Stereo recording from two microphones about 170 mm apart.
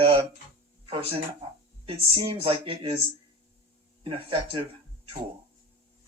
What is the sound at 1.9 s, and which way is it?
Speech, 30° right (ahead or behind).